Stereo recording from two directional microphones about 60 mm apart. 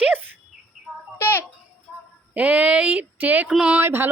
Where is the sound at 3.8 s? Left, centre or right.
Right.